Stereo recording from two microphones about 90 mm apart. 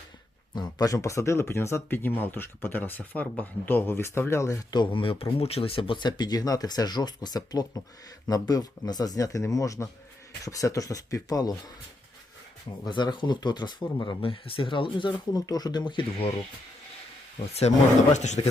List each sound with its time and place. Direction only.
0.5 s speech: 45° left (ahead or behind)
4.7 s speech: 65° left (ahead or behind); by 11.5 s 45° left (ahead or behind)
12.9 s speech: 60° left (ahead or behind)
14.2 s speech: 80° left
15.3 s speech: 45° left (ahead or behind); by 16.3 s 65° left (ahead or behind)
18.4 s chopping: 65° left (ahead or behind)